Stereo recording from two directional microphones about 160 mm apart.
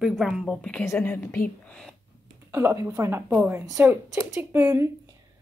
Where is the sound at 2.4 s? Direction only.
15° right (ahead or behind).